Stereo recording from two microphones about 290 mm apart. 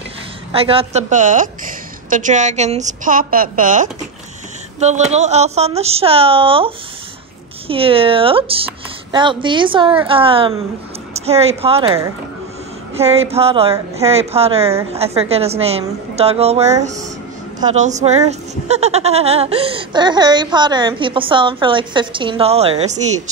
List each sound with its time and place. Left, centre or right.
0.5 s a woman's voice: centre